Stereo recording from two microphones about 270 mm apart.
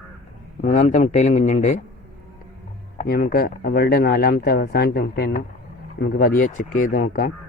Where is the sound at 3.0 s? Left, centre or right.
Left.